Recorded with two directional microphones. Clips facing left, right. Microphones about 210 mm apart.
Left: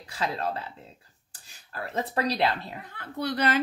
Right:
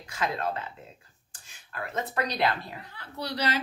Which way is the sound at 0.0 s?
35° left (ahead or behind).